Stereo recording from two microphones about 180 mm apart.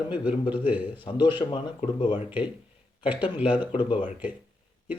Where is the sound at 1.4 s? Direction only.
30° left (ahead or behind).